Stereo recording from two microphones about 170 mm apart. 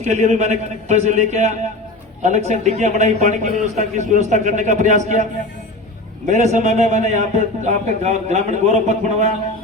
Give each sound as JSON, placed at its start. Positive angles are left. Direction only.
{"t": 0.0, "sound": "a man's voice", "side_deg": -45}
{"t": 6.2, "sound": "a man's voice", "side_deg": -45}